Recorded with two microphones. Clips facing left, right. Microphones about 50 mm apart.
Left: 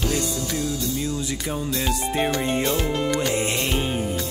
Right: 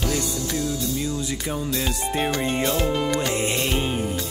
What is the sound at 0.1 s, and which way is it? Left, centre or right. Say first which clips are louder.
Music: even; left.